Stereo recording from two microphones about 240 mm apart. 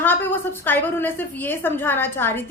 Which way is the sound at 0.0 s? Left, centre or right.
Centre.